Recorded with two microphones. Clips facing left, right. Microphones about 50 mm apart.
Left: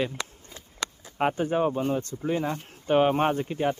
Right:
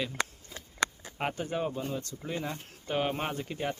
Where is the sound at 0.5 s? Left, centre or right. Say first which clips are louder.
Right 2 dB; centre.